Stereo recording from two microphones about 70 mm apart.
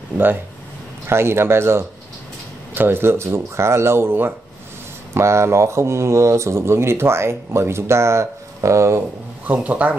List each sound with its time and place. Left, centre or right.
1.0 s speech: right
9.5 s speech: right